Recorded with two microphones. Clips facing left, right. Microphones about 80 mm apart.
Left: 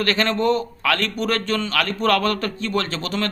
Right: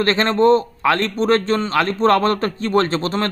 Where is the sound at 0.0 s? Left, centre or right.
Right.